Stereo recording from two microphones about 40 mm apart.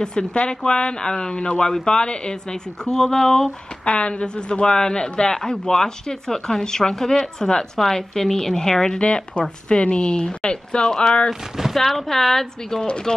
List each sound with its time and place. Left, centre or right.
0.0 s speech: centre
3.8 s speech: left
11.7 s speech: centre
12.8 s speech: left